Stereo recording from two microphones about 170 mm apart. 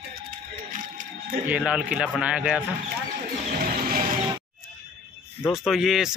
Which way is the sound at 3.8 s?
60° right (ahead or behind).